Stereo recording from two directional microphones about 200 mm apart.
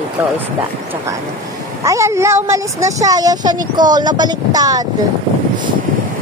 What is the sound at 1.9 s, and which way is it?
Speech, 15° right (ahead or behind).